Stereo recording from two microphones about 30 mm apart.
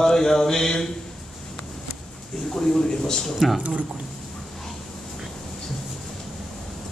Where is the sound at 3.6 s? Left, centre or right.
Right.